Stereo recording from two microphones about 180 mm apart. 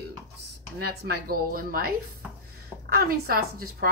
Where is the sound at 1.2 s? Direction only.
55° right (ahead or behind).